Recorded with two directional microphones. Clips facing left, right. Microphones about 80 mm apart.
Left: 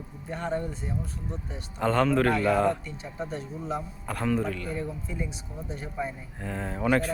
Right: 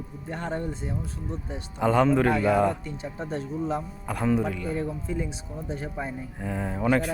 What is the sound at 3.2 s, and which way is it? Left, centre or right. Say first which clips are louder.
Speech: right 4 dB; right.